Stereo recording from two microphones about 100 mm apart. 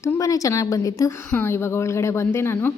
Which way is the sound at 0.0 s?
35° left (ahead or behind).